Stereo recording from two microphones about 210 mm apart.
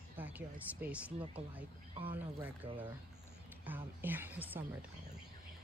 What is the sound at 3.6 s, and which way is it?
Speech, 10° right (ahead or behind).